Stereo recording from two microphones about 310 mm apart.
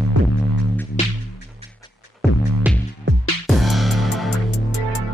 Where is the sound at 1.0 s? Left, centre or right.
Left.